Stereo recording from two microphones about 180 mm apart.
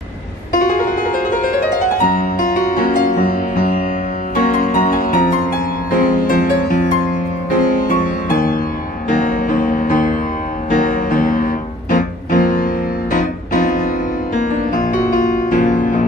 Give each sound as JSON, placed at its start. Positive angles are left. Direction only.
{"t": 0.5, "sound": "music", "side_deg": 50}
{"t": 2.0, "sound": "music", "side_deg": 50}